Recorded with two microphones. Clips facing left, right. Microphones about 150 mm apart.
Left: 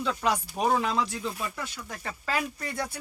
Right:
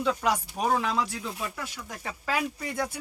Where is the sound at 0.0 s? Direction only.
10° right (ahead or behind).